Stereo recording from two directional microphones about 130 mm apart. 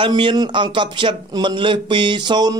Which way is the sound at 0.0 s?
40° right (ahead or behind).